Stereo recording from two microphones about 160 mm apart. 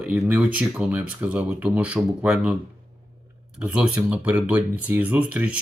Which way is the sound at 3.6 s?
10° right (ahead or behind).